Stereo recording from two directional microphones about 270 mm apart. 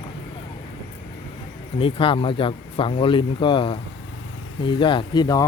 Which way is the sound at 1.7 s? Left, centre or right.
Centre.